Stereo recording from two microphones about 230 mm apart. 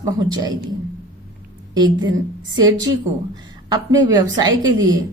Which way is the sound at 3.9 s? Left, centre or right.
Centre.